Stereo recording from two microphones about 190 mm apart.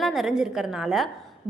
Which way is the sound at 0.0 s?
Centre (ahead or behind).